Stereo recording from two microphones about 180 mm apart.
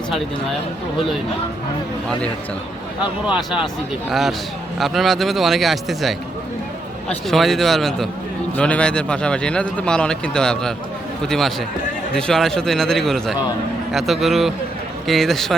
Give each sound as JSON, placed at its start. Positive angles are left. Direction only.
{"t": 3.0, "sound": "a man's voice", "side_deg": -5}